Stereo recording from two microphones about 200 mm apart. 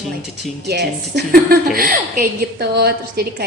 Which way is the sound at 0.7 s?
55° right (ahead or behind).